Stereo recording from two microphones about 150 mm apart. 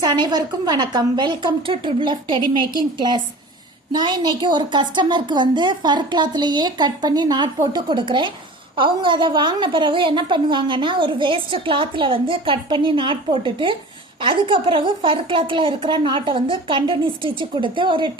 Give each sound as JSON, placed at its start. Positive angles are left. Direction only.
{"t": 0.0, "sound": "a woman's voice", "side_deg": -30}